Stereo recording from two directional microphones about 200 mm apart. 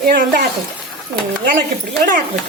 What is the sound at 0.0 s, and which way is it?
Speech, 45° right (ahead or behind).